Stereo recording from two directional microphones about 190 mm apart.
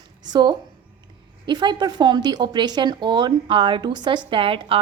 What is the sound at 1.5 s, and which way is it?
A woman's voice, 25° right (ahead or behind).